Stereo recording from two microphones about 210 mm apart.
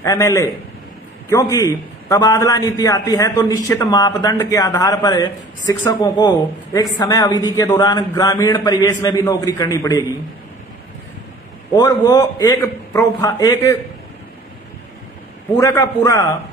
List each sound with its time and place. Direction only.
0.0 s a man's voice: 15° left (ahead or behind)
11.7 s a man's voice: 20° left (ahead or behind)
15.5 s a man's voice: 15° left (ahead or behind)